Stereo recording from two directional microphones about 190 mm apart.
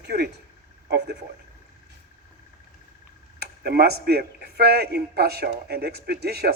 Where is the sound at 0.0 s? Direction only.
55° right (ahead or behind).